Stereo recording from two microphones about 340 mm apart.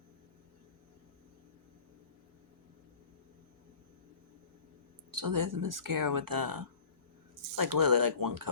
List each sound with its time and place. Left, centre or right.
5.1 s speech: right